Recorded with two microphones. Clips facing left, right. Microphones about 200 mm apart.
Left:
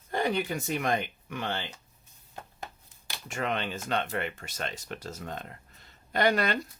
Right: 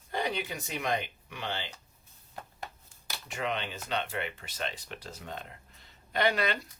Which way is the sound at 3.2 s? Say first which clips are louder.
Left 3 dB; 50° left (ahead or behind).